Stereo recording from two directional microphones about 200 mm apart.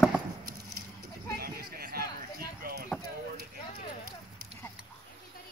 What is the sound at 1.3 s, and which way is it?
Speech, 50° right (ahead or behind).